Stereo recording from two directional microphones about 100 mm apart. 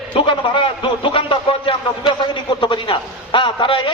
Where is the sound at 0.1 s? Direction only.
60° left (ahead or behind).